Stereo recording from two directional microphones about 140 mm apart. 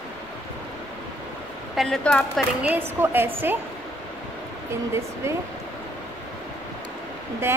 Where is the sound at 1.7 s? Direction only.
Centre (ahead or behind).